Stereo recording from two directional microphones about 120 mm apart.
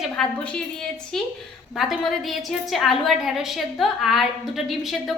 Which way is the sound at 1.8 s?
Centre (ahead or behind).